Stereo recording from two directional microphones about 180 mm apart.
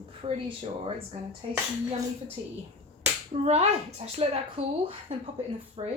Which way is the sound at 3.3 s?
35° right (ahead or behind).